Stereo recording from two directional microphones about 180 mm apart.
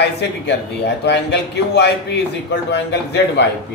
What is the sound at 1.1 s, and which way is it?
A man's voice, 70° left (ahead or behind).